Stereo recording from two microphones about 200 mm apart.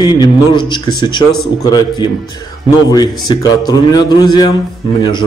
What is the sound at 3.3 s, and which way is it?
A man's voice, 20° left (ahead or behind).